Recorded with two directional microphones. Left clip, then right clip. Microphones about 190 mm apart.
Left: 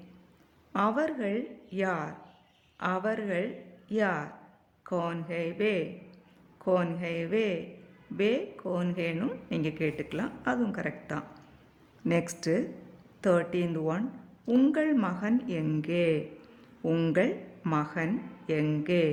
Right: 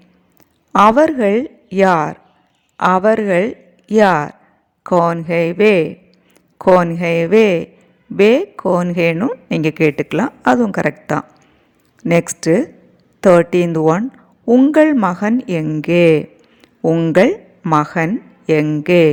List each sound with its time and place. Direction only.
0.7 s a woman's voice: 50° right (ahead or behind)
14.4 s speech: 35° right (ahead or behind)
14.7 s a woman's voice: 45° right (ahead or behind)
16.8 s speech: 30° right (ahead or behind)
17.1 s a woman's voice: 45° right (ahead or behind)